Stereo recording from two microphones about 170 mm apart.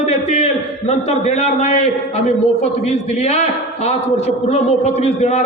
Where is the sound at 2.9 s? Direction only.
40° left (ahead or behind).